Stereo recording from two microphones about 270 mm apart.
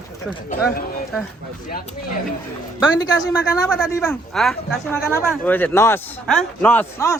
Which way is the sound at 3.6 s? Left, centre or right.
Centre.